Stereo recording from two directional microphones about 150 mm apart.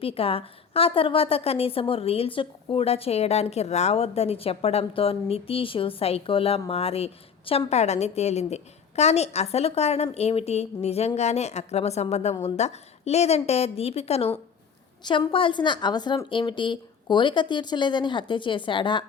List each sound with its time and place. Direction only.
0.0 s a woman's voice: 40° left (ahead or behind)
15.0 s a woman's voice: 30° left (ahead or behind)